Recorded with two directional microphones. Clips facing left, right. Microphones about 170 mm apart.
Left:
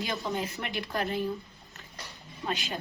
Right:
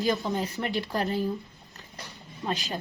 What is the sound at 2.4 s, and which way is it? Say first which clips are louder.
Speech: right 2 dB; 35° right (ahead or behind).